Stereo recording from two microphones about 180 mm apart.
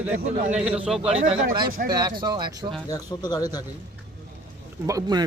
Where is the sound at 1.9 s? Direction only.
25° right (ahead or behind).